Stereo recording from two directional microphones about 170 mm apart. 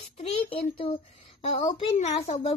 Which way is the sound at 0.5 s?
35° left (ahead or behind).